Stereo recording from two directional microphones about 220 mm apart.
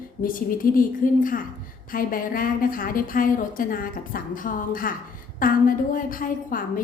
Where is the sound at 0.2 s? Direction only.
40° left (ahead or behind).